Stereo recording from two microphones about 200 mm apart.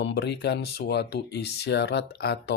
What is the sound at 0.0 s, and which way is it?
Speech, 55° left (ahead or behind).